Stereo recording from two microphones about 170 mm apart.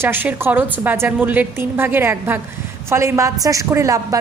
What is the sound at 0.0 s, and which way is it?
A woman's voice, 10° right (ahead or behind).